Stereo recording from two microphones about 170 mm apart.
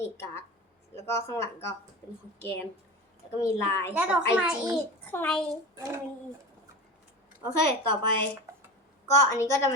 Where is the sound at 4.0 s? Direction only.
5° right (ahead or behind).